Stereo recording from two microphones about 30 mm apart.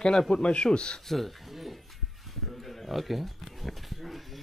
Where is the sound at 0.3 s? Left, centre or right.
Left.